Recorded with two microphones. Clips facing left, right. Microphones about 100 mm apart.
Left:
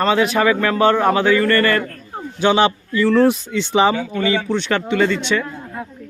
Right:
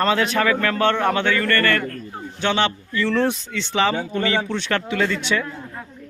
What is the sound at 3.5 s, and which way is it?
Speech, 15° left (ahead or behind).